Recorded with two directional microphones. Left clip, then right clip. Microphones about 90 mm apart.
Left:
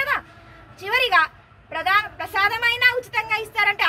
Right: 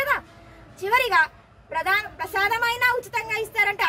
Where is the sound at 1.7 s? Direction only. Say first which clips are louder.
Left 3 dB; 70° right (ahead or behind).